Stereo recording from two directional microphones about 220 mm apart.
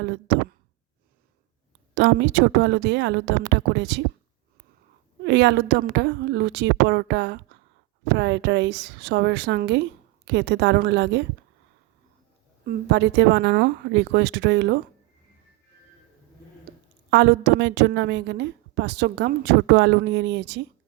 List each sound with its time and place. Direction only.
0.0 s a sound: 50° right (ahead or behind)
2.0 s a woman's voice: 50° right (ahead or behind)
5.2 s a woman's voice: 50° right (ahead or behind)
12.6 s a woman's voice: 50° right (ahead or behind)
17.1 s a woman's voice: 55° right (ahead or behind)